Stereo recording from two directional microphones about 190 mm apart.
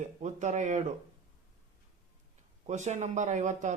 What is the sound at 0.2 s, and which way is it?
Speech, 40° right (ahead or behind).